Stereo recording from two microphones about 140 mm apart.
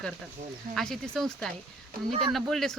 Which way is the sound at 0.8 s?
5° left (ahead or behind).